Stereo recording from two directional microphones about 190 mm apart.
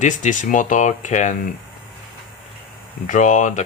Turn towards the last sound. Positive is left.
turn(degrees=40)  # may be behind; listen again after turning